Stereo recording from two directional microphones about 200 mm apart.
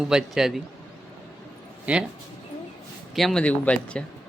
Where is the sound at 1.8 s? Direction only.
5° right (ahead or behind).